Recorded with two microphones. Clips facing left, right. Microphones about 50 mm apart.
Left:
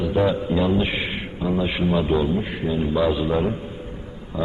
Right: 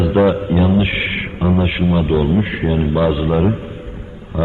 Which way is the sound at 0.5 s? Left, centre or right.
Right.